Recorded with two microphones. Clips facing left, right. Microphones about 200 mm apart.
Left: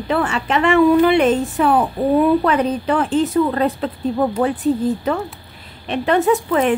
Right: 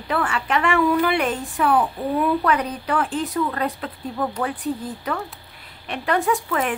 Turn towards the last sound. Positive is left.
turn(degrees=25)  # may be behind; listen again after turning